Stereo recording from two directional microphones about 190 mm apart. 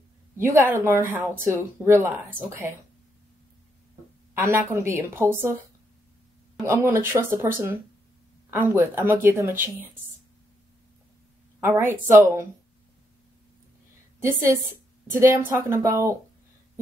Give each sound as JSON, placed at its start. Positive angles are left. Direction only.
{"t": 0.4, "sound": "a woman's voice", "side_deg": -15}
{"t": 4.3, "sound": "a woman's voice", "side_deg": -15}
{"t": 6.6, "sound": "a woman's voice", "side_deg": -15}
{"t": 11.6, "sound": "a woman's voice", "side_deg": -15}
{"t": 14.2, "sound": "a woman's voice", "side_deg": -15}